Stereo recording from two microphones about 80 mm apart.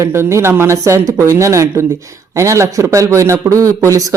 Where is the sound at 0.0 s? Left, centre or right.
Right.